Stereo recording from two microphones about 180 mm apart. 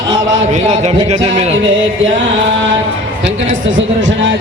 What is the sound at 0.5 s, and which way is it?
Speech, 40° right (ahead or behind).